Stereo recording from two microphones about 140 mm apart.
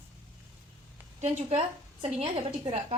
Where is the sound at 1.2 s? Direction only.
50° right (ahead or behind).